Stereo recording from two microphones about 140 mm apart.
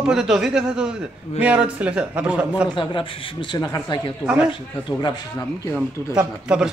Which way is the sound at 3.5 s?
30° left (ahead or behind).